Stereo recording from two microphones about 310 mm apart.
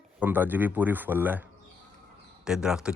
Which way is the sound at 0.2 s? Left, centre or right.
Centre.